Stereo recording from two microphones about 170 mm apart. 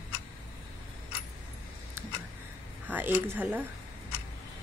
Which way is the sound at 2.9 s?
10° right (ahead or behind).